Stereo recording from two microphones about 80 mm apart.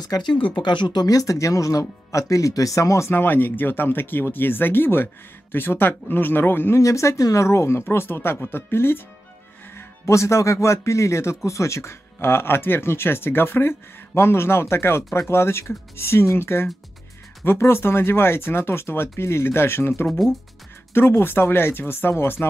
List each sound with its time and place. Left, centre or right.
0.0 s speech: left
6.8 s speech: left
9.8 s speech: left